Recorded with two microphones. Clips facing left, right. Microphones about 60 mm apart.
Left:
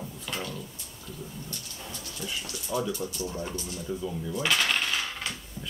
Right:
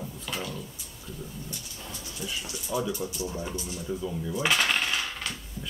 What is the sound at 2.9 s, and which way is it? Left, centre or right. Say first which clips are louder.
Speech: even; centre.